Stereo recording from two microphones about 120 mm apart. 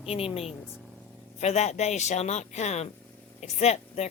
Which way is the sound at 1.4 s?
70° left (ahead or behind).